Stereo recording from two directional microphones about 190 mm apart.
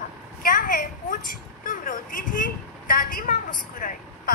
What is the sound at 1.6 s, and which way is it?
A woman's voice, 45° left (ahead or behind).